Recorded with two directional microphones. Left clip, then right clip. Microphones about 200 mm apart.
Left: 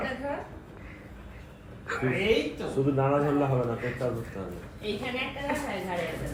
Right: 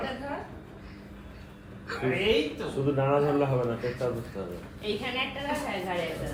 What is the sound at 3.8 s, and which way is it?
Speech, centre (ahead or behind).